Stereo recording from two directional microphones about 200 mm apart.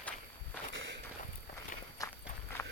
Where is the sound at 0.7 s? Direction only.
70° right (ahead or behind).